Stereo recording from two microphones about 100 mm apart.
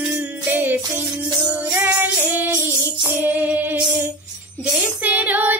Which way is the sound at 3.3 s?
15° right (ahead or behind).